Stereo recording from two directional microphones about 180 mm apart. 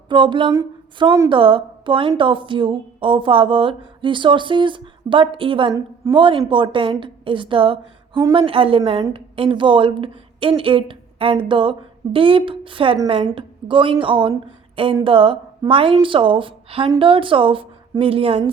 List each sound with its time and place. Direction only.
0.1 s a woman's voice: 25° right (ahead or behind)